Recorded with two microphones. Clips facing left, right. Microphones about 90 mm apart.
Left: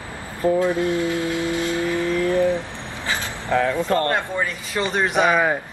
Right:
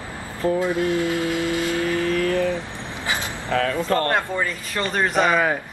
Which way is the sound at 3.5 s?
20° left (ahead or behind).